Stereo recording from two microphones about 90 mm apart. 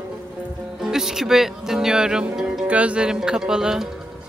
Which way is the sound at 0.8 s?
5° right (ahead or behind).